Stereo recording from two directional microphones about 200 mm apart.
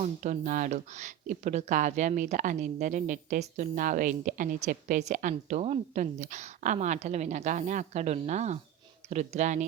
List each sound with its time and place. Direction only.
0.0 s speech: 40° right (ahead or behind)